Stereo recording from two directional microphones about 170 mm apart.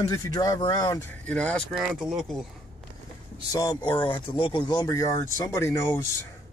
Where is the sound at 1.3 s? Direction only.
5° left (ahead or behind).